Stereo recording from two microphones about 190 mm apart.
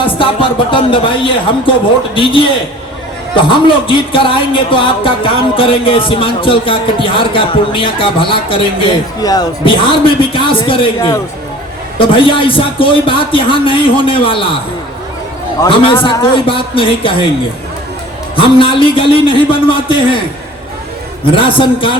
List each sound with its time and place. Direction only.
0.0 s speech: 25° left (ahead or behind)
3.5 s speech: 25° left (ahead or behind)
15.6 s speech: 30° left (ahead or behind)
18.3 s speech: 25° left (ahead or behind)
21.2 s speech: 25° left (ahead or behind)